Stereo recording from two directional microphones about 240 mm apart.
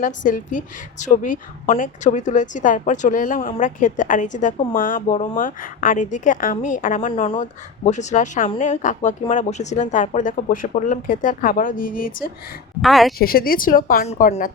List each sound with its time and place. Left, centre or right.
0.0 s speech: left
12.8 s a woman's voice: centre
13.1 s speech: left